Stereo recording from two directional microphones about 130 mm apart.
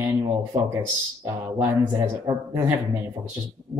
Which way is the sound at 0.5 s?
40° right (ahead or behind).